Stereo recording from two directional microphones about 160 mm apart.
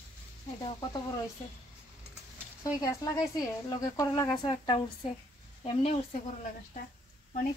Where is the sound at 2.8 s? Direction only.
20° left (ahead or behind); by 6.0 s 40° left (ahead or behind).